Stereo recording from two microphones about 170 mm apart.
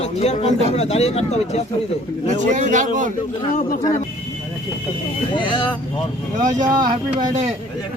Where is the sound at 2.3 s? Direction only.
45° right (ahead or behind).